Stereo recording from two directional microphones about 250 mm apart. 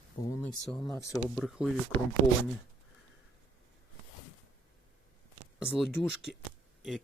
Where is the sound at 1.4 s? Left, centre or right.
Centre.